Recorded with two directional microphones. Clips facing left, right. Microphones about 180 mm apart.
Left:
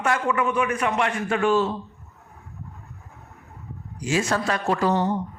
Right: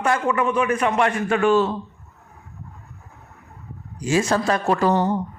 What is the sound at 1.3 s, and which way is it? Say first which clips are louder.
Speech: right 3 dB; 70° right (ahead or behind).